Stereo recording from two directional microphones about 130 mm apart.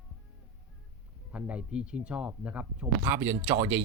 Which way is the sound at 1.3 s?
10° right (ahead or behind).